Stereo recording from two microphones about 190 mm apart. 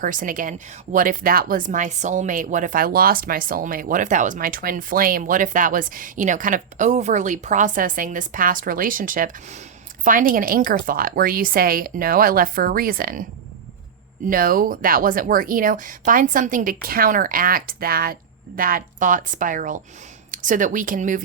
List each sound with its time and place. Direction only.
0.0 s speech: 45° right (ahead or behind)
14.3 s speech: 50° right (ahead or behind)